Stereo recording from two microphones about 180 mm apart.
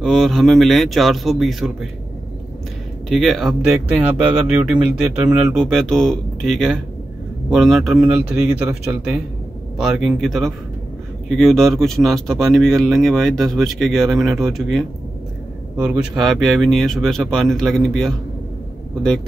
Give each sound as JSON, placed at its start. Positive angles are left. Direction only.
{"t": 0.0, "sound": "speech", "side_deg": 0}
{"t": 3.1, "sound": "speech", "side_deg": 0}